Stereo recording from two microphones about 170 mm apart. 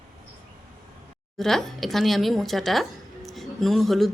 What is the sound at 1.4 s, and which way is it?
A woman's voice, centre (ahead or behind).